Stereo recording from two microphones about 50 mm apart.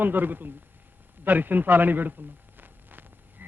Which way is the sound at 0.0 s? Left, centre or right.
Right.